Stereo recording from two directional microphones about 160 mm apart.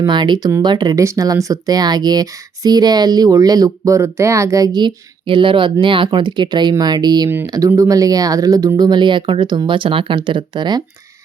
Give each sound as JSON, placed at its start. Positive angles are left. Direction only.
{"t": 0.0, "sound": "speech", "side_deg": -30}